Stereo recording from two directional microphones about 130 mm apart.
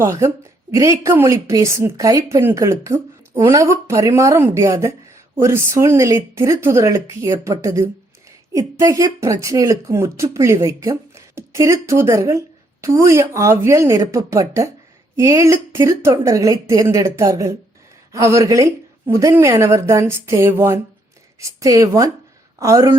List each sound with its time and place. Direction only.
0.0 s a woman's voice: 20° right (ahead or behind)